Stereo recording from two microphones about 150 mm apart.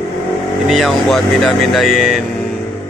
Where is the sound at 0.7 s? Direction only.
Centre (ahead or behind).